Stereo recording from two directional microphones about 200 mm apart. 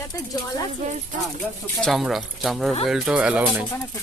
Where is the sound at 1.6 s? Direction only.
5° left (ahead or behind).